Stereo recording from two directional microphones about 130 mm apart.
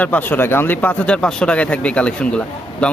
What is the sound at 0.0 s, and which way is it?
Speech, 15° left (ahead or behind).